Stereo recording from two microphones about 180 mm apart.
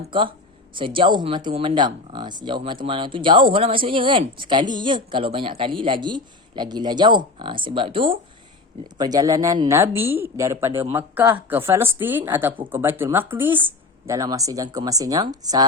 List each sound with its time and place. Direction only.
0.1 s speech: 25° right (ahead or behind)